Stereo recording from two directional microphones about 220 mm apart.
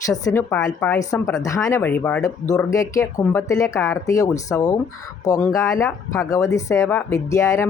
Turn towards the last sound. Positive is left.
turn(degrees=15)  # may be behind; listen again after turning